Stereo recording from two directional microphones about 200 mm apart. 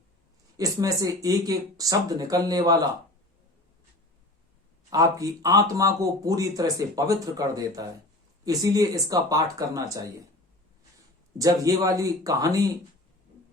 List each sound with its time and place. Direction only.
0.5 s speech: 15° right (ahead or behind)
4.9 s speech: 15° right (ahead or behind)
11.3 s speech: 15° right (ahead or behind)